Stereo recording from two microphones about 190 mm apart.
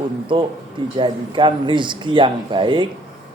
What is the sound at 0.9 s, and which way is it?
A man's voice, 25° right (ahead or behind).